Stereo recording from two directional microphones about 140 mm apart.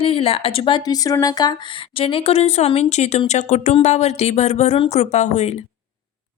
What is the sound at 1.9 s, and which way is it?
Speech, 40° left (ahead or behind).